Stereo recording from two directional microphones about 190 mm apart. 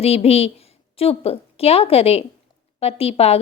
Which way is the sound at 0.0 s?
30° left (ahead or behind).